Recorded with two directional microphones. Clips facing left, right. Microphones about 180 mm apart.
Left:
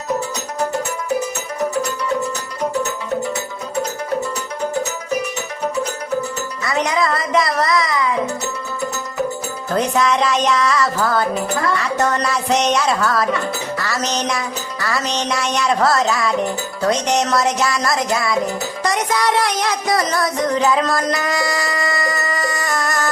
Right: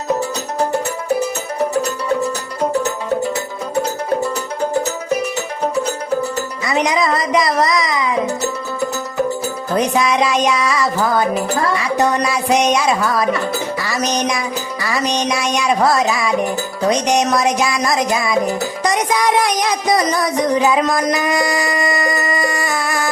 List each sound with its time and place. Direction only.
6.7 s music: 15° right (ahead or behind)
9.7 s music: 15° right (ahead or behind)
18.9 s a sound: 15° right (ahead or behind)